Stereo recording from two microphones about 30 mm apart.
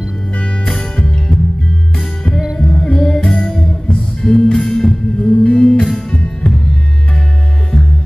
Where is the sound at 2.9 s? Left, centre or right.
Centre.